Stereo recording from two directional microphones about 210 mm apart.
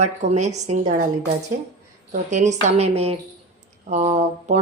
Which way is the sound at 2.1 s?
35° right (ahead or behind).